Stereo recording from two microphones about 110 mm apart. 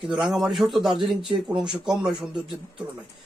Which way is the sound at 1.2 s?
50° right (ahead or behind).